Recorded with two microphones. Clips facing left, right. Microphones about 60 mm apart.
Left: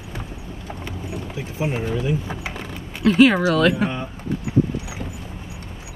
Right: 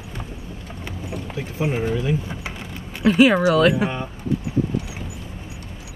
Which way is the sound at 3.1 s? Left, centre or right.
Centre.